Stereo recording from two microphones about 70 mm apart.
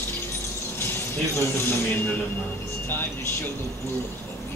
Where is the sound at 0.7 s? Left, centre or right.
Left.